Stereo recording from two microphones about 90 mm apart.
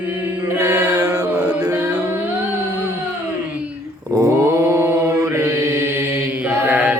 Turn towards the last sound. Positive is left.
turn(degrees=-15)  # may be behind; listen again after turning